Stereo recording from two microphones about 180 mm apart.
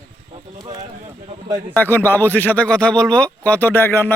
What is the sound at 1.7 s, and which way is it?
Speech, 10° left (ahead or behind).